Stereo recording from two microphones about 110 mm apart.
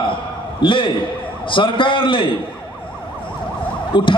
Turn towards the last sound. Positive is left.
turn(degrees=50)  # may be behind; listen again after turning